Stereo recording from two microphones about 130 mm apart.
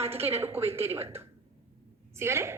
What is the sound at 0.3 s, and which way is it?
A woman's voice, 20° right (ahead or behind).